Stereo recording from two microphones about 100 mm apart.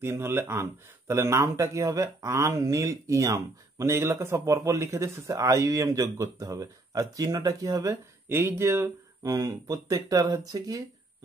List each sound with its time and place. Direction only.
0.0 s speech: 25° right (ahead or behind)
7.9 s speech: 25° right (ahead or behind)